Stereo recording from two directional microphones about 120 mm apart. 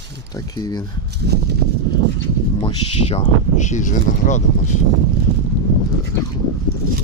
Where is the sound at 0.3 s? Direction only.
30° left (ahead or behind).